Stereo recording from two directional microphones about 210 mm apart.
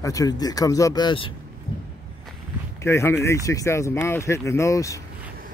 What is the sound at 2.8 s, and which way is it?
Speech, 10° left (ahead or behind).